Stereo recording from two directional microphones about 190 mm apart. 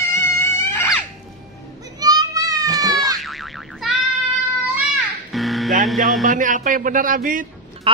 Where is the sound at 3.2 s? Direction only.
Centre (ahead or behind).